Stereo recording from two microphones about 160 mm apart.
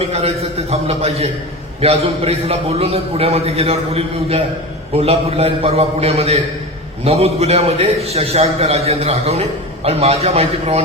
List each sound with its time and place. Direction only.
0.0 s a man's voice: 40° right (ahead or behind)